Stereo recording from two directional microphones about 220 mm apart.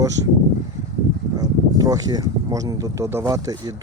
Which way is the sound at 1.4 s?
15° right (ahead or behind).